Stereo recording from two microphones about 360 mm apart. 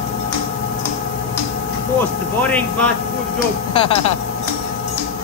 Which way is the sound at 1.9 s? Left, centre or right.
Centre.